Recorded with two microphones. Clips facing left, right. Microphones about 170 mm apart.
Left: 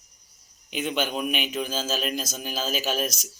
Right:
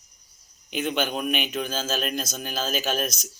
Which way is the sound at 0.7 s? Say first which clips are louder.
Right 1 dB; 50° right (ahead or behind).